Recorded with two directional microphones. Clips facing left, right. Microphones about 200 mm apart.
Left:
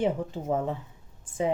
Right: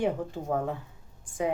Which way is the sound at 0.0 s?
20° left (ahead or behind).